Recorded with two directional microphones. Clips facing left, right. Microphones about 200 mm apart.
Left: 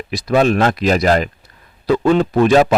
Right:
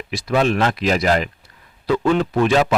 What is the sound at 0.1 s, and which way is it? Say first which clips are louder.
A man's voice: left 4 dB; 40° left (ahead or behind).